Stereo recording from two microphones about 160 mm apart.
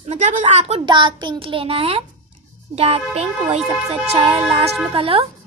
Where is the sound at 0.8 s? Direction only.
30° right (ahead or behind).